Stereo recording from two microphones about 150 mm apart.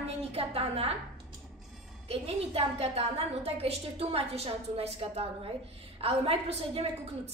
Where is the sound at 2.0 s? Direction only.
40° right (ahead or behind).